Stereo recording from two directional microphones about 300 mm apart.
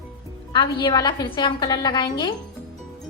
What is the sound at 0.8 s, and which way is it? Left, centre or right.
A woman's voice, centre.